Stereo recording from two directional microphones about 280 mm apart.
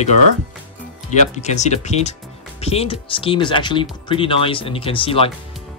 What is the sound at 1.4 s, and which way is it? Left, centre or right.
Speech, left.